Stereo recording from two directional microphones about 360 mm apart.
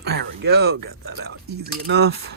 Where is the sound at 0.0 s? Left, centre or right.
Right.